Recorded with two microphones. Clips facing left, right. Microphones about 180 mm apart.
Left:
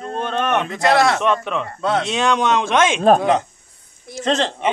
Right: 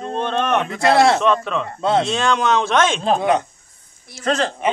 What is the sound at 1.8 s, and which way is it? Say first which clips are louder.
Speech: right 3 dB; 25° right (ahead or behind).